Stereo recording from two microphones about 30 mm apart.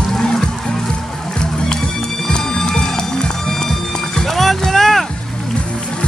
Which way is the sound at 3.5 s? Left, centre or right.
Centre.